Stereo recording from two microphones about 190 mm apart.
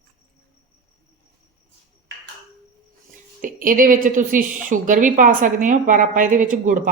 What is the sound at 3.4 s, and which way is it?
A woman's voice, 45° right (ahead or behind).